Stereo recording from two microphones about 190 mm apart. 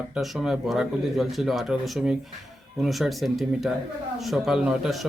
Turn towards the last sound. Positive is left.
turn(degrees=0)  # may be behind; listen again after turning